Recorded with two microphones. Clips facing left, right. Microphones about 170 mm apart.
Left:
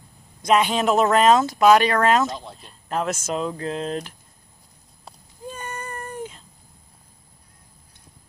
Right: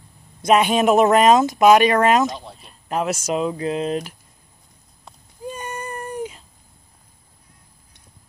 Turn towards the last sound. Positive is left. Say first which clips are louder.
# right 4 dB
turn(degrees=-10)  # may be behind; listen again after turning